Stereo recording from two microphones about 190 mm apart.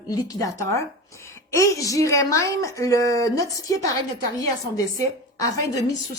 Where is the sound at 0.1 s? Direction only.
20° left (ahead or behind).